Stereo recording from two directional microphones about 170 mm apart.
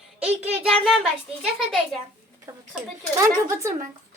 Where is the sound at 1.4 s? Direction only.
Centre (ahead or behind).